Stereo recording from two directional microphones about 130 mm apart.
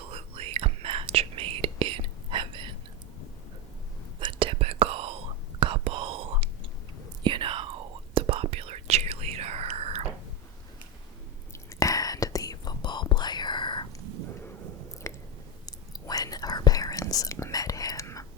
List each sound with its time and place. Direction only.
0.0 s whispering: 50° right (ahead or behind)
4.2 s whispering: 40° right (ahead or behind)
11.5 s whispering: 25° left (ahead or behind)
15.1 s chewing: 20° left (ahead or behind)
15.6 s whispering: 30° left (ahead or behind)